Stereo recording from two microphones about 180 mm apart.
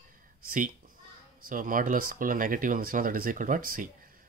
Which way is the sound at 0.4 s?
55° right (ahead or behind).